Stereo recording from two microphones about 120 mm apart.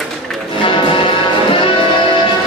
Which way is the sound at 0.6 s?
45° left (ahead or behind).